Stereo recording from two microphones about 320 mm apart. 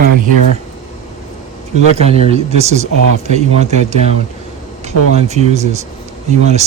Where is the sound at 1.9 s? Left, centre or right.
Centre.